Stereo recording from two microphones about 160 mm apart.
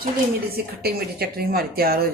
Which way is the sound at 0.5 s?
75° right (ahead or behind).